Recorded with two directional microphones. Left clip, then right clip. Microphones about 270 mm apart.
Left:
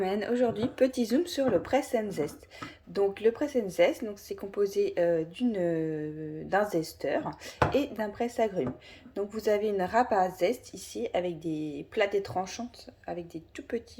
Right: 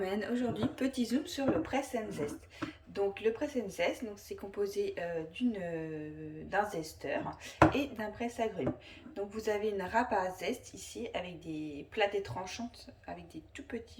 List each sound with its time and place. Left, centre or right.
0.0 s a woman's voice: centre